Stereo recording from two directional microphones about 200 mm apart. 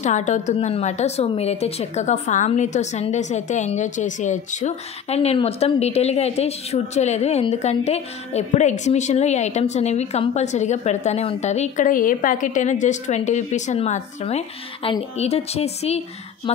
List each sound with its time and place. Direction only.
0.0 s a woman's voice: 35° left (ahead or behind)